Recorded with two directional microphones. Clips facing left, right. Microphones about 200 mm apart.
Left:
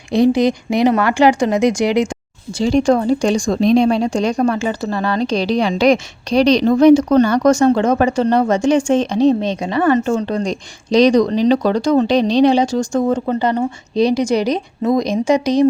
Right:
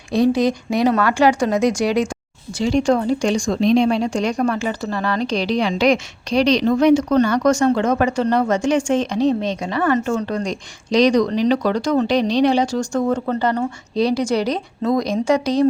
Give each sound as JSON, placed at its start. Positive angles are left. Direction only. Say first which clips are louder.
{"t": 0.1, "sound": "speech", "louder": "left 3 dB", "side_deg": 15}
{"t": 2.8, "sound": "a woman's voice", "louder": "left 3 dB", "side_deg": 40}